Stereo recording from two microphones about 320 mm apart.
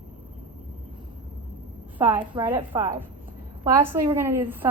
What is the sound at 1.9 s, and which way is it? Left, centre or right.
A woman's voice, centre.